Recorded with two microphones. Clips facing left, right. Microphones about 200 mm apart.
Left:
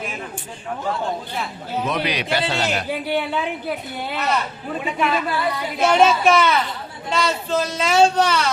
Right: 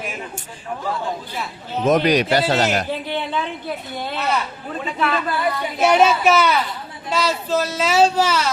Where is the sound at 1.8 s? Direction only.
45° right (ahead or behind).